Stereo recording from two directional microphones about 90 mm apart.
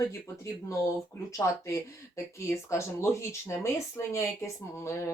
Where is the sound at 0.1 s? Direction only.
35° left (ahead or behind).